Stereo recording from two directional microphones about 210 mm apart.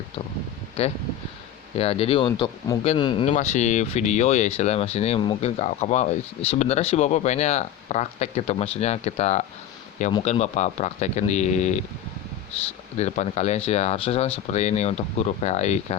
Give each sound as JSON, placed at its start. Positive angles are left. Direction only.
{"t": 0.8, "sound": "speech", "side_deg": 30}
{"t": 3.2, "sound": "speech", "side_deg": 35}
{"t": 13.0, "sound": "speech", "side_deg": 30}